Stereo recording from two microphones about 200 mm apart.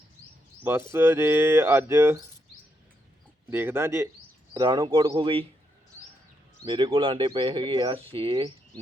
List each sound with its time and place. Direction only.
0.6 s speech: 10° right (ahead or behind)
3.5 s speech: 10° right (ahead or behind)
6.7 s speech: 25° right (ahead or behind)